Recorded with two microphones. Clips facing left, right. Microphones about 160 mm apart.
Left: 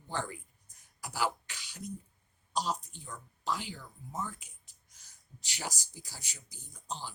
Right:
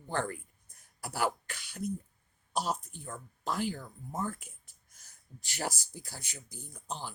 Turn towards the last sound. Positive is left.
turn(degrees=-55)  # may be behind; listen again after turning